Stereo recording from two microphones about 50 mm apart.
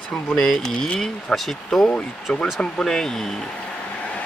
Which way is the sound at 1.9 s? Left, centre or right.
Left.